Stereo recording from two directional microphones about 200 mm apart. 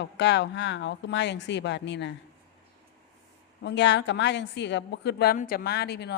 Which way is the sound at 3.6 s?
60° left (ahead or behind).